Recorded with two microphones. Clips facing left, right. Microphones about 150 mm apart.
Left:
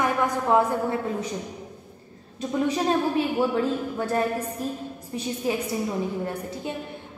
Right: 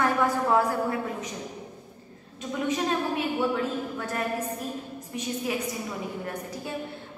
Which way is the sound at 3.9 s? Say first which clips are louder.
Left 7 dB; 30° left (ahead or behind).